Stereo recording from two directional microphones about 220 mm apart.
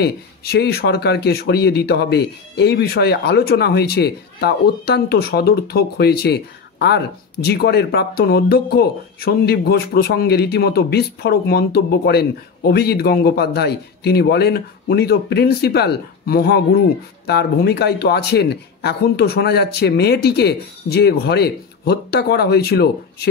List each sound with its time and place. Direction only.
0.0 s speech: 45° left (ahead or behind)